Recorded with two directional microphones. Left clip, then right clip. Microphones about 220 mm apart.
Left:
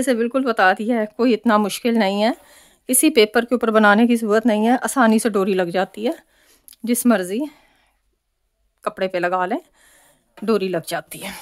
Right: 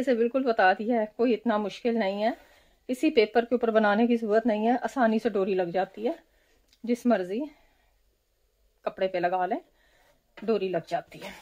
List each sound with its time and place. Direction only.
0.0 s speech: 35° left (ahead or behind)
8.8 s speech: 40° left (ahead or behind)